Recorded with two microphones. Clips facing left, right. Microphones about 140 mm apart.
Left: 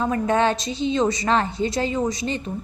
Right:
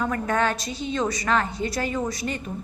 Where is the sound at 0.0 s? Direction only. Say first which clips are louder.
Left 4 dB; 25° left (ahead or behind).